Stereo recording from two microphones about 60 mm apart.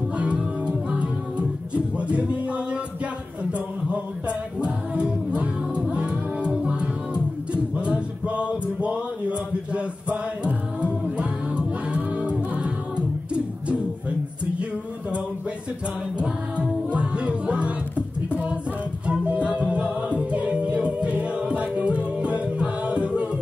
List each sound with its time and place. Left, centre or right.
0.2 s music: centre
16.2 s music: centre
18.3 s singing: right
19.0 s music: right